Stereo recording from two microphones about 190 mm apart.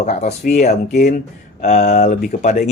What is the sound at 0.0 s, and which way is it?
A man's voice, 35° left (ahead or behind).